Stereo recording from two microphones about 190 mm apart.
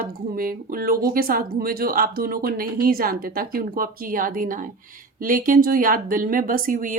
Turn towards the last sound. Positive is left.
turn(degrees=-45)  # may be behind; listen again after turning